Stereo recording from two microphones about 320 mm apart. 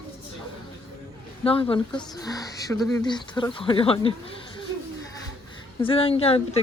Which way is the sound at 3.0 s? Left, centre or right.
Centre.